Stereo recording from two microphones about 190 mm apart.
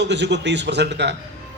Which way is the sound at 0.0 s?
65° right (ahead or behind).